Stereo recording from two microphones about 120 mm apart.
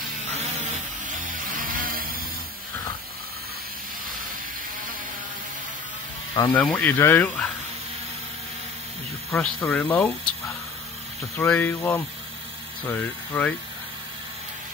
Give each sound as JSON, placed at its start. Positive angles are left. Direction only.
{"t": 0.7, "sound": "music", "side_deg": -90}
{"t": 6.5, "sound": "speech", "side_deg": 15}
{"t": 9.3, "sound": "speech", "side_deg": 15}
{"t": 11.3, "sound": "speech", "side_deg": 15}